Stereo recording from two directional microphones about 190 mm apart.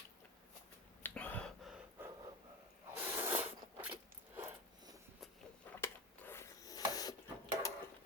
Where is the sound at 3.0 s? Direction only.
10° right (ahead or behind).